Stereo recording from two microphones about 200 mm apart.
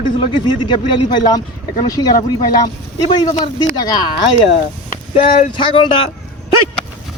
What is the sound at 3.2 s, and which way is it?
Speech, 20° left (ahead or behind).